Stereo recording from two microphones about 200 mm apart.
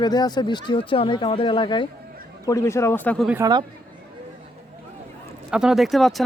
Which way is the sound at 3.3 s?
15° right (ahead or behind).